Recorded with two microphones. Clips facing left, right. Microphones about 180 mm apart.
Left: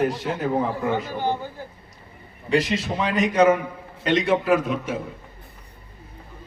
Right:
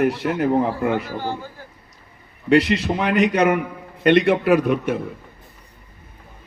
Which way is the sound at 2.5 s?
65° right (ahead or behind).